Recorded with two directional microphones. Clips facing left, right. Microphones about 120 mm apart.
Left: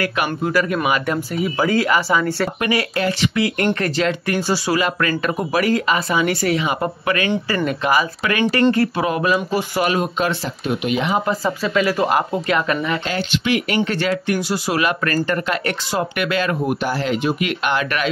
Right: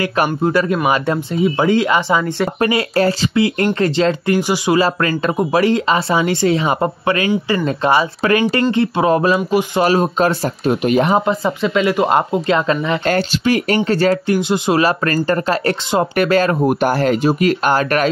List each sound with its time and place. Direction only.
0.2 s speech: 30° right (ahead or behind)
2.6 s speech: 35° right (ahead or behind)
11.2 s speech: 20° right (ahead or behind)
13.1 s speech: 40° right (ahead or behind)
14.3 s speech: 20° right (ahead or behind)
14.8 s speech: 35° right (ahead or behind)